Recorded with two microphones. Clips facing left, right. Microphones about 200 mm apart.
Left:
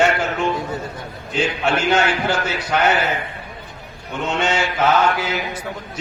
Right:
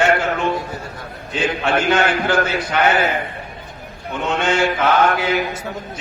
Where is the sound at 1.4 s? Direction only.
55° right (ahead or behind).